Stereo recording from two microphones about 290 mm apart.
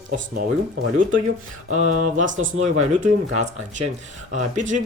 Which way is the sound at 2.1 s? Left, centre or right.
Right.